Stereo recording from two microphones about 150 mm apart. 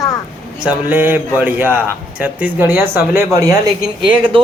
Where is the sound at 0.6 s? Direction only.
10° right (ahead or behind).